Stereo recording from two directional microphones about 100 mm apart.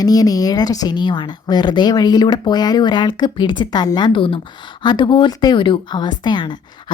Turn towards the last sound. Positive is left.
turn(degrees=50)  # may be behind; listen again after turning